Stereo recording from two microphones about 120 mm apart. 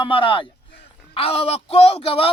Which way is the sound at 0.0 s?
45° left (ahead or behind).